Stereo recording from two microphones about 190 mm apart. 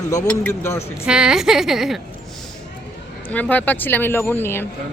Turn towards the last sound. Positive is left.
turn(degrees=10)  # may be behind; listen again after turning